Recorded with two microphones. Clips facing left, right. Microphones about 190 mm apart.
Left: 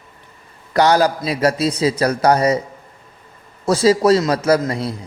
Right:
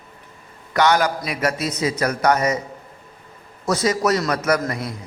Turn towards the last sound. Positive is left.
turn(degrees=30)  # may be behind; listen again after turning